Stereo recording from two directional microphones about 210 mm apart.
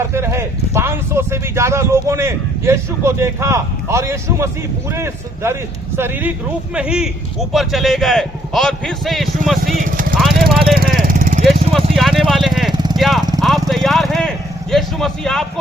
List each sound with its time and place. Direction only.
0.0 s speech: 10° right (ahead or behind)
9.7 s speech: 40° right (ahead or behind)
10.2 s vehicle: centre (ahead or behind)
10.8 s vehicle: 40° right (ahead or behind)
11.9 s speech: centre (ahead or behind)
12.7 s vehicle: 20° right (ahead or behind)
13.0 s speech: centre (ahead or behind)